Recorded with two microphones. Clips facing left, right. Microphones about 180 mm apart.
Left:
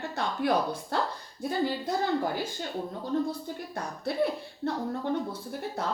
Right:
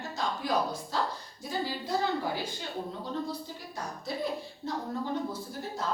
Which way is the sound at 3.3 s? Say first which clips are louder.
Left 4 dB; 60° left (ahead or behind).